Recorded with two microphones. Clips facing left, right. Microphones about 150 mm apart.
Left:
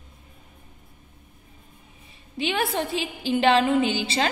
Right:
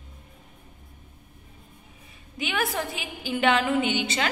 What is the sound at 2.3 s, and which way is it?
A woman's voice, 30° left (ahead or behind).